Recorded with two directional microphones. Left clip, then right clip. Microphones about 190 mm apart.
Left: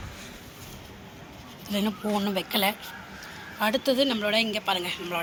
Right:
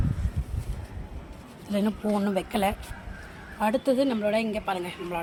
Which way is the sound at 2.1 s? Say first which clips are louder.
Left 2 dB; 35° right (ahead or behind).